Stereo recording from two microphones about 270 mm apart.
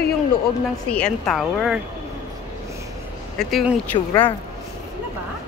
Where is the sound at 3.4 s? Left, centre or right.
Centre.